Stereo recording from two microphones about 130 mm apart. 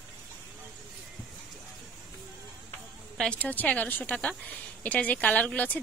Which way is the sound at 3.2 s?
10° left (ahead or behind).